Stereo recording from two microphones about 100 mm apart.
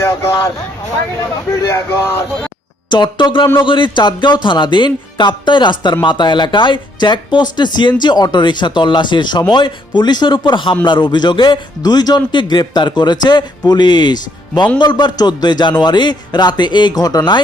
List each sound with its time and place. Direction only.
0.0 s speech: 30° left (ahead or behind)
2.9 s speech: 50° left (ahead or behind)